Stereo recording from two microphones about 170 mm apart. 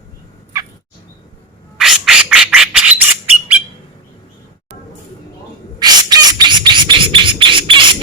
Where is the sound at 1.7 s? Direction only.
Centre (ahead or behind).